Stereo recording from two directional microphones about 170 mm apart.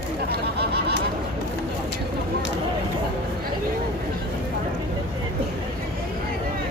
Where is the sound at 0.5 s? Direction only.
75° right (ahead or behind).